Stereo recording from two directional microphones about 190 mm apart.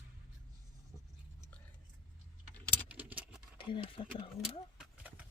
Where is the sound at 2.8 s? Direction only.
10° right (ahead or behind).